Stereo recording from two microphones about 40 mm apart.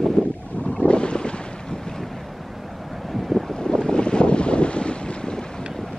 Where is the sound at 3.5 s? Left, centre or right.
Centre.